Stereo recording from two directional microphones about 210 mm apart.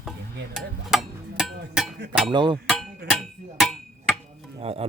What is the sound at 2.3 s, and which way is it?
Speech, 20° right (ahead or behind).